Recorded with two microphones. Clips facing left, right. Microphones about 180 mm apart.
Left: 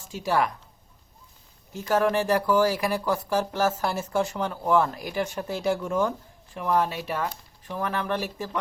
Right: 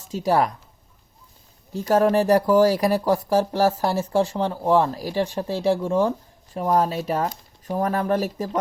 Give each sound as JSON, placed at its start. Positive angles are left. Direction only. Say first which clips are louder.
{"t": 0.1, "sound": "speech", "louder": "right 4 dB", "side_deg": -35}
{"t": 1.7, "sound": "speech", "louder": "right 5 dB", "side_deg": -35}